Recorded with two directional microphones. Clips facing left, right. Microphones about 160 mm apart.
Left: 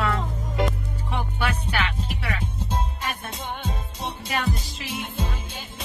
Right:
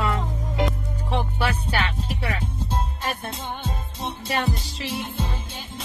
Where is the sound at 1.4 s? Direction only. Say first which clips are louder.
Right 1 dB; 35° right (ahead or behind).